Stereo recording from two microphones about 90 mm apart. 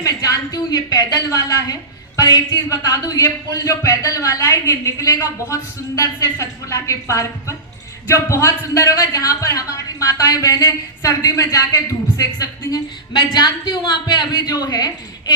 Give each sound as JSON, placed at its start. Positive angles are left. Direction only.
{"t": 0.0, "sound": "a sound", "side_deg": 40}
{"t": 2.1, "sound": "a woman's voice", "side_deg": 45}
{"t": 13.1, "sound": "a woman's voice", "side_deg": 60}